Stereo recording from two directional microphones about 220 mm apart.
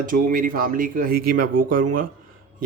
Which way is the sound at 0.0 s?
40° right (ahead or behind).